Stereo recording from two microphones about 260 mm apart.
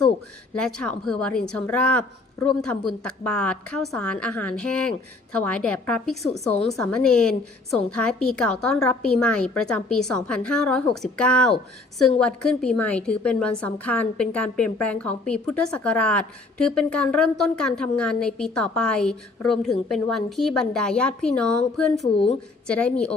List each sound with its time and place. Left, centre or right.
0.6 s a woman's voice: centre
22.0 s speech: left
22.6 s a woman's voice: centre